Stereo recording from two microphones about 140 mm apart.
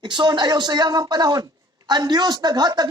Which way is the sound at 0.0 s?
30° right (ahead or behind).